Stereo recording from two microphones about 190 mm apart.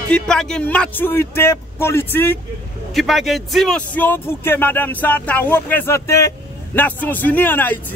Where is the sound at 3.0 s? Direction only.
Centre (ahead or behind).